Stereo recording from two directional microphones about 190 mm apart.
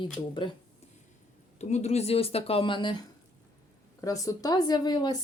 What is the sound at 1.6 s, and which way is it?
Speech, 35° left (ahead or behind).